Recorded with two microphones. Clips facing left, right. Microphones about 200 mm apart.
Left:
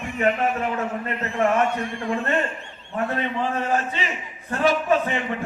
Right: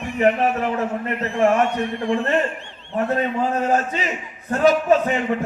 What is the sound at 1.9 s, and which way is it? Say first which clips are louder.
A man's voice: right 5 dB; 35° right (ahead or behind).